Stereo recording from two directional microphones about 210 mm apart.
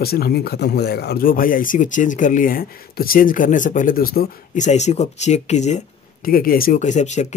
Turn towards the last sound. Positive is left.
turn(degrees=35)  # may be behind; listen again after turning